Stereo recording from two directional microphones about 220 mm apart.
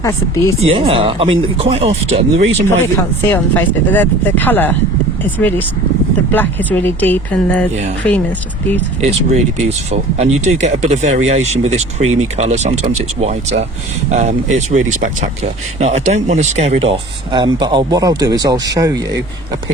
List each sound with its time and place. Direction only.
0.0 s speech: 15° left (ahead or behind)
0.6 s speech: 25° right (ahead or behind)
3.0 s speech: 10° left (ahead or behind)
9.0 s speech: 30° right (ahead or behind)